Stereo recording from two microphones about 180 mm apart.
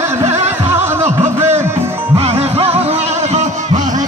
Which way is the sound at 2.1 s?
35° right (ahead or behind).